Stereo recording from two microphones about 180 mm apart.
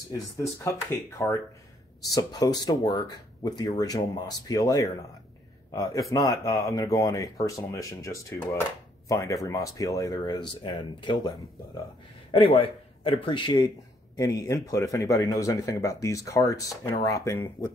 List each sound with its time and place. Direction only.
0.4 s speech: 15° left (ahead or behind)
6.0 s a man's voice: 20° left (ahead or behind)